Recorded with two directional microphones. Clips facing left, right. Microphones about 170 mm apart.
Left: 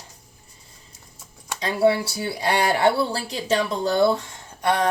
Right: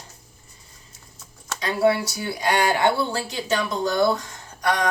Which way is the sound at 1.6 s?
30° left (ahead or behind).